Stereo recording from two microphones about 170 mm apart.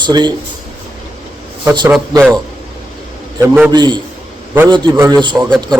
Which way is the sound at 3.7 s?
25° right (ahead or behind).